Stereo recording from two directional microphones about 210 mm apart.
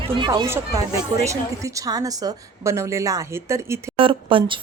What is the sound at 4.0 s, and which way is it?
Speech, 25° right (ahead or behind).